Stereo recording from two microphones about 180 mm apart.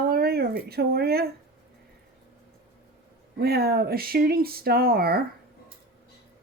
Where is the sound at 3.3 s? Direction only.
60° right (ahead or behind).